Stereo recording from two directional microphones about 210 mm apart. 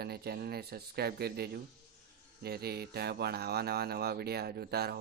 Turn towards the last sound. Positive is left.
turn(degrees=-50)  # may be behind; listen again after turning